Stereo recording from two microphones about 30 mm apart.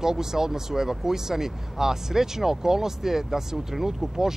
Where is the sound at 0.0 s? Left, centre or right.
Centre.